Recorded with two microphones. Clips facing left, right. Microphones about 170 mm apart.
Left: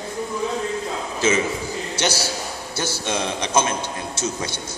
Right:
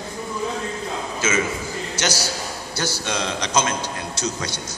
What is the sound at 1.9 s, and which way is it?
A man's voice, 25° left (ahead or behind).